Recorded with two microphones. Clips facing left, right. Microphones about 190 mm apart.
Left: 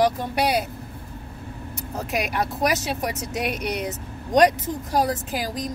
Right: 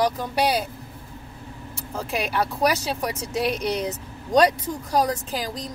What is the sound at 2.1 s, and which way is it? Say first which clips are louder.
Speech: even; 35° right (ahead or behind).